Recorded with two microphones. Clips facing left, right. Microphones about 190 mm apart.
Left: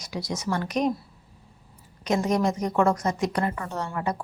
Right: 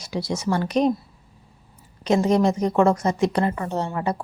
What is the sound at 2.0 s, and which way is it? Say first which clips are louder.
A woman's voice: right 5 dB; 30° right (ahead or behind).